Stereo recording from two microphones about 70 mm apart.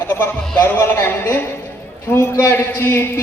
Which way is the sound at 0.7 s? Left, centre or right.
Left.